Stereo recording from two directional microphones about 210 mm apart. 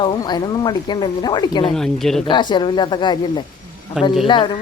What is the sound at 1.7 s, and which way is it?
Speech, centre (ahead or behind).